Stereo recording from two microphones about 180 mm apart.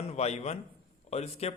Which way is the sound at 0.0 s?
35° left (ahead or behind).